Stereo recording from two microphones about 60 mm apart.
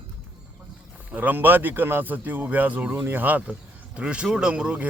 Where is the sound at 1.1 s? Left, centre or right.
Right.